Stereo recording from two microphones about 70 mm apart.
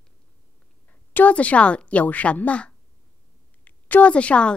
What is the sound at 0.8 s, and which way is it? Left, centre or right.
A woman's voice, left.